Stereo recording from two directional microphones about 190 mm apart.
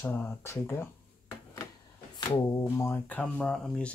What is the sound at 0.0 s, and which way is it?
Speech, 10° left (ahead or behind).